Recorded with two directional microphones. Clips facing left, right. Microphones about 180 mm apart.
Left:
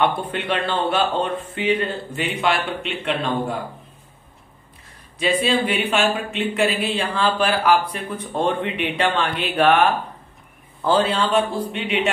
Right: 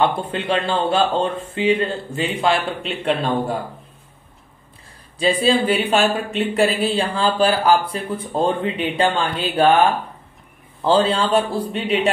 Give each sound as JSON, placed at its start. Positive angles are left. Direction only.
{"t": 0.0, "sound": "speech", "side_deg": -25}
{"t": 5.2, "sound": "speech", "side_deg": -35}
{"t": 10.8, "sound": "speech", "side_deg": -30}